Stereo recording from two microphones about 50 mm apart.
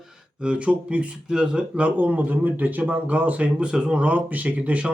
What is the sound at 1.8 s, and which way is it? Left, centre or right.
Speech, right.